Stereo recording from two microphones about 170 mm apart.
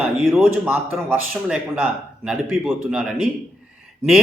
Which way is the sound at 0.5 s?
10° right (ahead or behind).